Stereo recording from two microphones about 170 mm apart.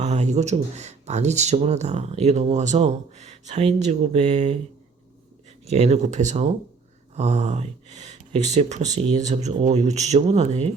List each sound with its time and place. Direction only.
0.0 s speech: 40° right (ahead or behind)
5.6 s speech: 40° right (ahead or behind)